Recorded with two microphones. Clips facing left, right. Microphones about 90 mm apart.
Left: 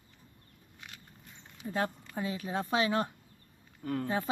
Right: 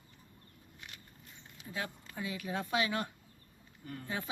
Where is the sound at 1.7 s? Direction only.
40° left (ahead or behind).